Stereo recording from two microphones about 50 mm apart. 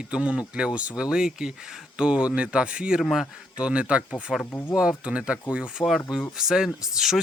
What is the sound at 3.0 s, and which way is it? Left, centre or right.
Speech, centre.